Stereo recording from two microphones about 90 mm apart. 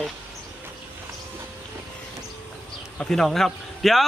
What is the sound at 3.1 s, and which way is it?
Speech, 5° left (ahead or behind).